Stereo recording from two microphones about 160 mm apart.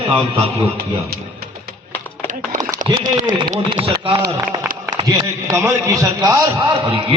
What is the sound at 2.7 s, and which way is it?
Speech, 55° right (ahead or behind).